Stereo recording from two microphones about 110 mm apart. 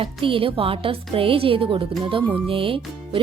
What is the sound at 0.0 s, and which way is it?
Speech, 55° right (ahead or behind).